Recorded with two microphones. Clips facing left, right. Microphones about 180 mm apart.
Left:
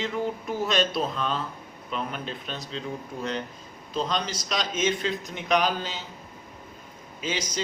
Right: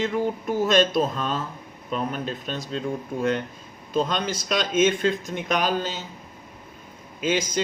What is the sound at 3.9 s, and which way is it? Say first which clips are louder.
Speech: right 4 dB; 50° right (ahead or behind).